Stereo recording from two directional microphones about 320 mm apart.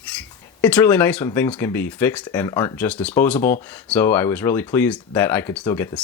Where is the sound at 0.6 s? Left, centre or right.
Centre.